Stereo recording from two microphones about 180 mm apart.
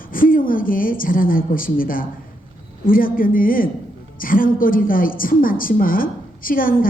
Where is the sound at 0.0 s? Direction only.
50° left (ahead or behind).